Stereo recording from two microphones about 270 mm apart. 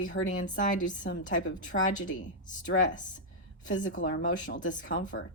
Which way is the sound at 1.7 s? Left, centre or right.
Left.